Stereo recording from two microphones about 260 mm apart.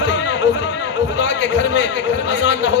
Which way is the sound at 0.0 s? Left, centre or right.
Left.